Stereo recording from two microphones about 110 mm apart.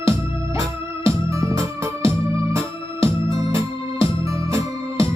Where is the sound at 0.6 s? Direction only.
30° right (ahead or behind).